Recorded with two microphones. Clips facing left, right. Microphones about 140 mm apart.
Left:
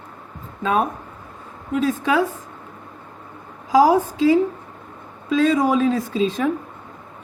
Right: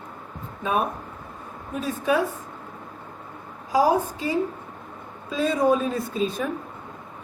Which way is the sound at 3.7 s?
90° left.